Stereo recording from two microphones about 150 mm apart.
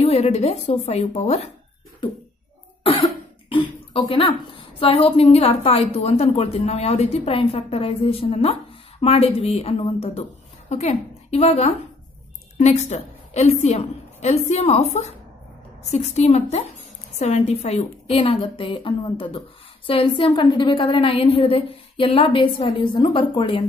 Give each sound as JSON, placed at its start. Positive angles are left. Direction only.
{"t": 0.0, "sound": "a woman's voice", "side_deg": 45}
{"t": 2.8, "sound": "cough", "side_deg": 40}
{"t": 4.1, "sound": "a woman's voice", "side_deg": 35}